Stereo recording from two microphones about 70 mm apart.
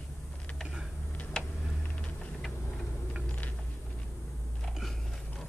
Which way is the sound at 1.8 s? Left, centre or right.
Centre.